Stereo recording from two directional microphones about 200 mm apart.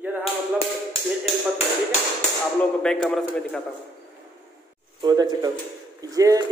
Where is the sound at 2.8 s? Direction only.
5° left (ahead or behind).